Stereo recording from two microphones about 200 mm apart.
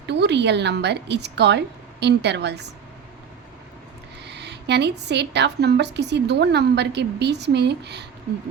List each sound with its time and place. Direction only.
0.1 s a woman's voice: 60° right (ahead or behind)
4.3 s a woman's voice: 60° right (ahead or behind)